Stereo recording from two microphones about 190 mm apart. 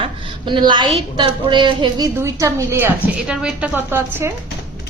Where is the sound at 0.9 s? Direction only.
25° right (ahead or behind).